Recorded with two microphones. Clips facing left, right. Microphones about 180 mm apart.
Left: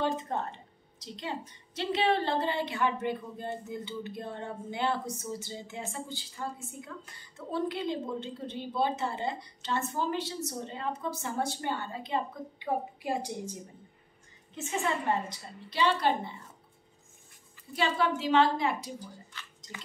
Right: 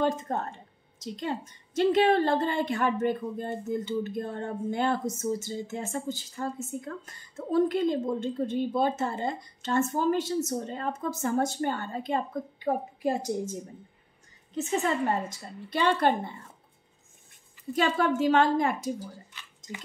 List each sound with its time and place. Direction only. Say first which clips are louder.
0.0 s a woman's voice: right 3 dB; 45° right (ahead or behind)
17.7 s a woman's voice: right 4 dB; 50° right (ahead or behind)